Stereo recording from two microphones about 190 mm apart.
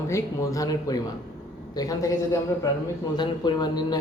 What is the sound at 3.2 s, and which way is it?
Speech, 20° left (ahead or behind).